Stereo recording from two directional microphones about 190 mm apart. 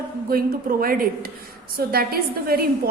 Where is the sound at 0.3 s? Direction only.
50° right (ahead or behind).